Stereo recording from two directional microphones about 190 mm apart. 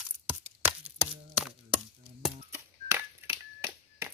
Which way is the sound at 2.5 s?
10° right (ahead or behind).